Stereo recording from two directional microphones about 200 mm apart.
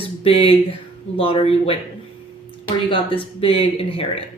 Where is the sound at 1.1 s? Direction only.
25° left (ahead or behind).